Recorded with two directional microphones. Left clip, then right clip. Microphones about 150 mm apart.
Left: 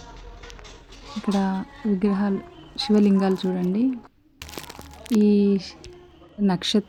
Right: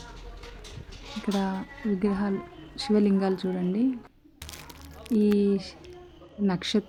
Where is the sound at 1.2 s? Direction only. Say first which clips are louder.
Left 4 dB; 35° left (ahead or behind).